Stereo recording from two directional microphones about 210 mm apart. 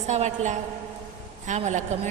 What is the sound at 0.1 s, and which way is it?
A woman's voice, 35° right (ahead or behind).